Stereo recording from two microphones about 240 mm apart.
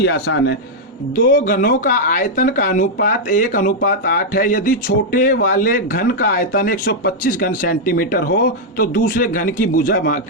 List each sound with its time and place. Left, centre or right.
0.0 s a man's voice: left
1.3 s speech: left